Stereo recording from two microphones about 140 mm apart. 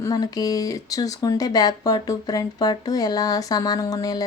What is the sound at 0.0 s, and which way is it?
Speech, 25° left (ahead or behind).